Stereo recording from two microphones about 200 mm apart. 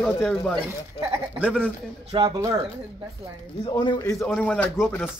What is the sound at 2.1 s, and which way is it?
Speech, 25° right (ahead or behind).